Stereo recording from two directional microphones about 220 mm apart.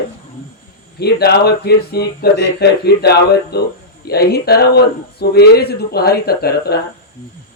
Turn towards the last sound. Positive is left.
turn(degrees=45)  # may be behind; listen again after turning